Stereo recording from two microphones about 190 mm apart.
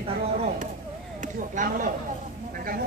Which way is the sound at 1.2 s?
45° right (ahead or behind).